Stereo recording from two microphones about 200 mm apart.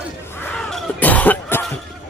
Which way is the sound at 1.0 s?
10° left (ahead or behind).